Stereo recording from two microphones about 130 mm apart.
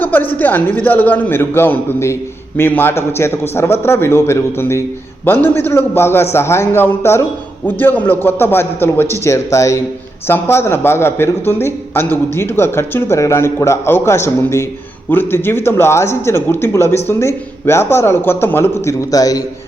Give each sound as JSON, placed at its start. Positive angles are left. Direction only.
{"t": 0.0, "sound": "a man's voice", "side_deg": 15}